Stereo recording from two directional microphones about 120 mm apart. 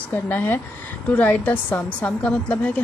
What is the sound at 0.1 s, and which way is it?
A woman's voice, 15° left (ahead or behind).